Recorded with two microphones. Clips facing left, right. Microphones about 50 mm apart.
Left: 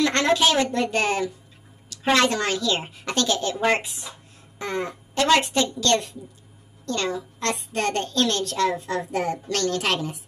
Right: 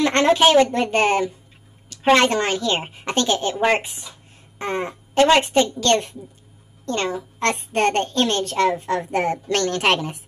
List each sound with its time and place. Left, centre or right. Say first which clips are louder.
0.0 s a child's voice: right 4 dB; right